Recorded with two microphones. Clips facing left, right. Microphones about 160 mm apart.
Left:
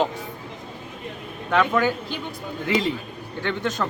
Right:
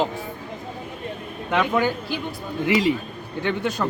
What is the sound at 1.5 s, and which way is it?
Speech, 15° right (ahead or behind).